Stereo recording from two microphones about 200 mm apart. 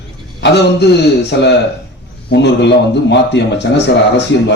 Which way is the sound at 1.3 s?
60° left (ahead or behind).